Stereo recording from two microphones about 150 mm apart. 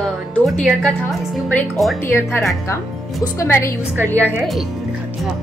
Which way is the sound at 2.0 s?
15° left (ahead or behind).